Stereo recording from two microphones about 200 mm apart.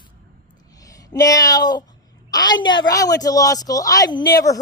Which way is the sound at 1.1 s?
15° left (ahead or behind).